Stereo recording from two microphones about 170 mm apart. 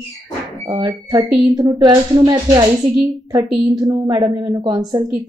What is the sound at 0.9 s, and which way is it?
A woman's voice, 25° right (ahead or behind).